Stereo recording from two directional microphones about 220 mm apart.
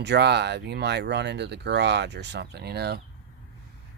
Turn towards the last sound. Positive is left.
turn(degrees=-45)  # may be behind; listen again after turning